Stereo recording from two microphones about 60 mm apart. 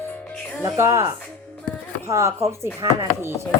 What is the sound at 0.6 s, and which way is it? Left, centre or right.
Speech, right.